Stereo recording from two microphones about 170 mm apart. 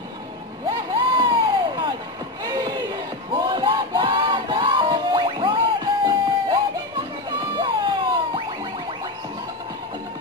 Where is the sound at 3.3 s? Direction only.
25° right (ahead or behind).